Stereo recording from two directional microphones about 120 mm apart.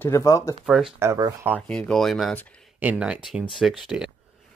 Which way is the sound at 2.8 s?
10° right (ahead or behind).